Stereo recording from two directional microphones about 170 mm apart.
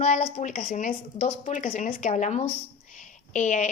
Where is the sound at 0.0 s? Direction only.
45° left (ahead or behind).